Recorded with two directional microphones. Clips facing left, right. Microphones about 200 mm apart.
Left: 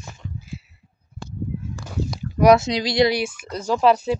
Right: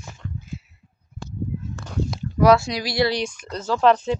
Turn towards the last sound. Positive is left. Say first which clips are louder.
# even
turn(degrees=5)  # may be behind; listen again after turning